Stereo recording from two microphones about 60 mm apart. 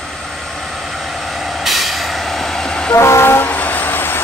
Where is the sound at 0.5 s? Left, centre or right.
Centre.